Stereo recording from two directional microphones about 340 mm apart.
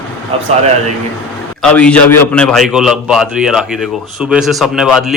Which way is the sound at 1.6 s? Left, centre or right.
Centre.